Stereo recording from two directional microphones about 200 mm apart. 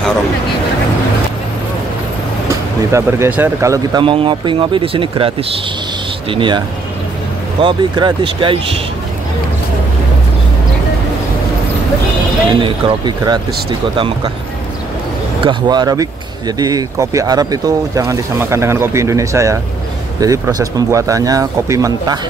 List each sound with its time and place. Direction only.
2.9 s speech: 10° right (ahead or behind)
6.3 s speech: 25° right (ahead or behind)
7.6 s speech: 25° right (ahead or behind)
12.6 s speech: 25° right (ahead or behind)
15.4 s speech: 20° right (ahead or behind)